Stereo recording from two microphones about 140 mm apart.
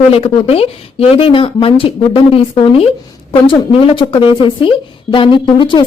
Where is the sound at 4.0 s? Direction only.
35° left (ahead or behind).